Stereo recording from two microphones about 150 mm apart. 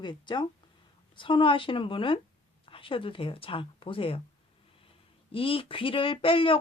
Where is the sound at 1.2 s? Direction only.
35° left (ahead or behind).